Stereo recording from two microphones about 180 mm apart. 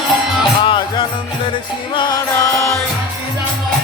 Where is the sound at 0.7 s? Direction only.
25° left (ahead or behind).